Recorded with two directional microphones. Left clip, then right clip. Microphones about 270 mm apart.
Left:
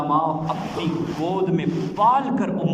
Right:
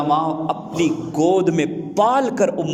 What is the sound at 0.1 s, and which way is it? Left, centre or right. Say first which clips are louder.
A man's voice: right 1 dB; right.